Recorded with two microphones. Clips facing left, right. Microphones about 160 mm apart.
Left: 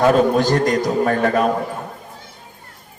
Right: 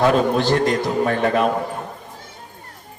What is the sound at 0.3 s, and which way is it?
A man's voice, 45° left (ahead or behind).